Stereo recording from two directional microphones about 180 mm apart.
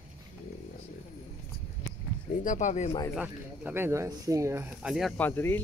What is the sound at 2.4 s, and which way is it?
Speech, 45° left (ahead or behind).